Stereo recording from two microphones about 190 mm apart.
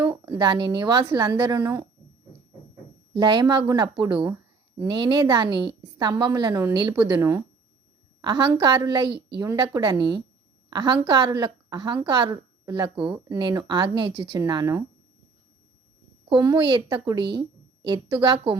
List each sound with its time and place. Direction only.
0.0 s a woman's voice: 20° right (ahead or behind)
3.1 s a woman's voice: 25° right (ahead or behind)
9.0 s a woman's voice: 60° right (ahead or behind)
9.4 s a woman's voice: 20° right (ahead or behind)
16.3 s a woman's voice: 25° right (ahead or behind)